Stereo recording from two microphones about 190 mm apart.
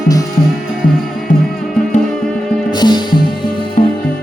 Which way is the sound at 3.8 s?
40° left (ahead or behind).